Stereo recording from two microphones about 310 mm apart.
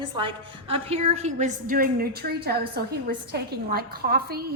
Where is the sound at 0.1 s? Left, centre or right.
Centre.